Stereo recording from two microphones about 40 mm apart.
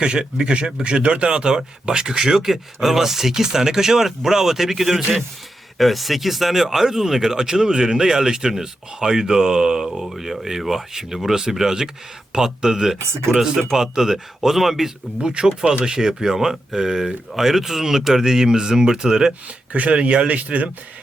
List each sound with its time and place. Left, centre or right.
0.0 s speech: right
9.9 s speech: centre
15.2 s speech: centre
19.7 s speech: right